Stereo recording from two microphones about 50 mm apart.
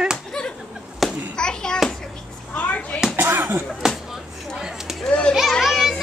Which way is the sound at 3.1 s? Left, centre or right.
Right.